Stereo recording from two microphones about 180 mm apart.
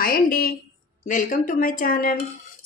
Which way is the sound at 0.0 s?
55° left (ahead or behind).